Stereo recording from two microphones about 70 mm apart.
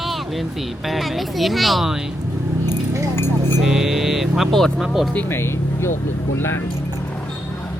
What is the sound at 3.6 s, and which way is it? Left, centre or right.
Vehicle, centre.